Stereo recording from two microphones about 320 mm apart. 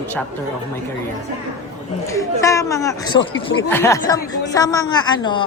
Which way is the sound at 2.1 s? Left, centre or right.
Centre.